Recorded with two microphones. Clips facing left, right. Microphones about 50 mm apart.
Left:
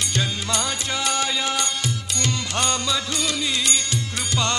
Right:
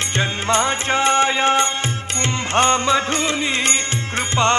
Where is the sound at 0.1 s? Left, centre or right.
Right.